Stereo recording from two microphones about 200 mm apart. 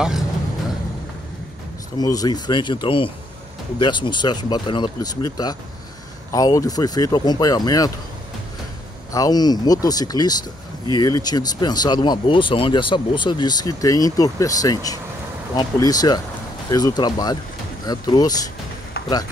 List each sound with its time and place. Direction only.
2.0 s speech: 20° left (ahead or behind)
9.1 s speech: 20° left (ahead or behind)